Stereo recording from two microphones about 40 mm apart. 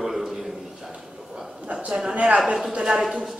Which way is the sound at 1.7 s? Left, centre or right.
Right.